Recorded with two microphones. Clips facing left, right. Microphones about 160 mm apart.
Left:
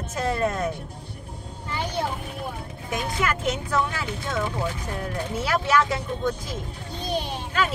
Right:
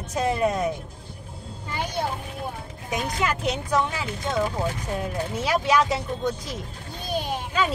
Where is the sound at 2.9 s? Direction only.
15° right (ahead or behind).